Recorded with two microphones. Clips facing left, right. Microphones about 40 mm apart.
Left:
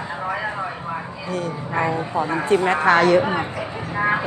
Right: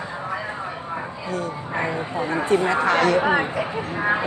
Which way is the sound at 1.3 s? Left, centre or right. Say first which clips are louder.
Left 3 dB; left.